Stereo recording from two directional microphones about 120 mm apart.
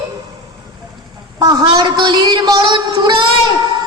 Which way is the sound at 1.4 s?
35° right (ahead or behind).